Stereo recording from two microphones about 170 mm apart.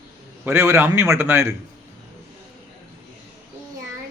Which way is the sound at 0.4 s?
15° right (ahead or behind).